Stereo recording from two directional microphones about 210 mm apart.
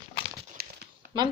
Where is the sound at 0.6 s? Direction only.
45° right (ahead or behind).